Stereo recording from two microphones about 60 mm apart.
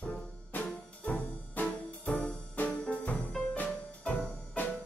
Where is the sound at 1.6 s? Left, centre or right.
Left.